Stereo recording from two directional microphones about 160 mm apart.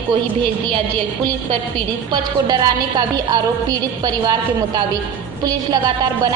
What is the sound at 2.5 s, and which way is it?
Speech, 25° right (ahead or behind).